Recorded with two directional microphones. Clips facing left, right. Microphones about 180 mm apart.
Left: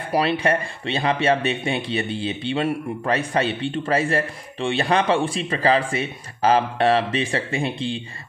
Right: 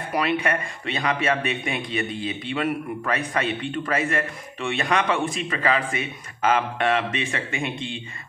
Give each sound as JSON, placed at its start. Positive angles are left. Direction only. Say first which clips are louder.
{"t": 0.1, "sound": "speech", "louder": "left 3 dB", "side_deg": 30}